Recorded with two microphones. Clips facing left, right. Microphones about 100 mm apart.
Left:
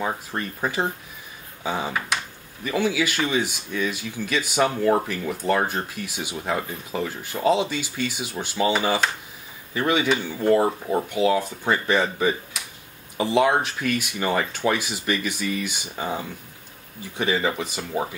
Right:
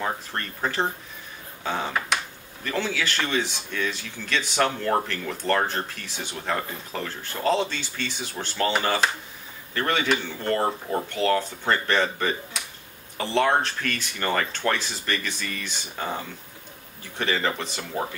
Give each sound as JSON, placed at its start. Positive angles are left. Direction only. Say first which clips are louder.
{"t": 0.0, "sound": "speech", "louder": "left 2 dB", "side_deg": 10}